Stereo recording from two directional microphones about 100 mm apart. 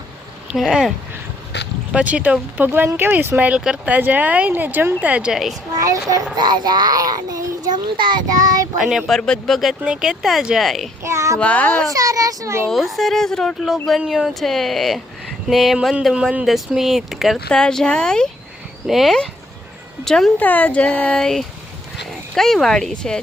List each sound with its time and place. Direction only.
0.4 s speech: 5° right (ahead or behind)
1.9 s speech: 10° right (ahead or behind)
5.7 s a child's voice: 35° right (ahead or behind)
6.3 s a child's voice: 45° right (ahead or behind)
8.8 s speech: centre (ahead or behind)
11.0 s a child's voice: 30° right (ahead or behind)
11.3 s speech: 15° left (ahead or behind)
11.9 s a child's voice: 35° right (ahead or behind)
12.6 s speech: centre (ahead or behind)
20.4 s speech: 15° left (ahead or behind)